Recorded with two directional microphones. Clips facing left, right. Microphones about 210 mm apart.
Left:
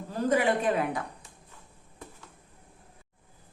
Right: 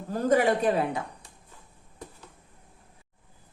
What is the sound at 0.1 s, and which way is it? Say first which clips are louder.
Speech: right 3 dB; 40° right (ahead or behind).